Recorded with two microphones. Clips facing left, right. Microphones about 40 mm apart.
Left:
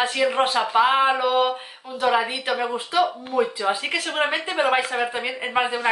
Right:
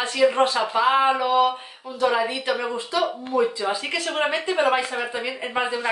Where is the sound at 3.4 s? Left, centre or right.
Left.